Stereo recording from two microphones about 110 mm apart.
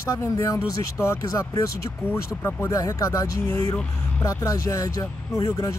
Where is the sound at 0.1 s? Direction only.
25° left (ahead or behind).